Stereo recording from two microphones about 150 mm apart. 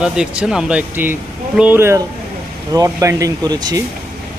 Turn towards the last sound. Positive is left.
turn(degrees=-25)  # may be behind; listen again after turning